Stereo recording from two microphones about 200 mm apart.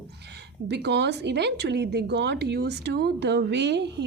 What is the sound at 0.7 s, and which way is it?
A woman's voice, 55° right (ahead or behind).